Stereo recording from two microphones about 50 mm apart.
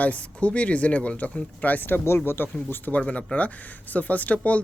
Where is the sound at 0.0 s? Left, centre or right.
Left.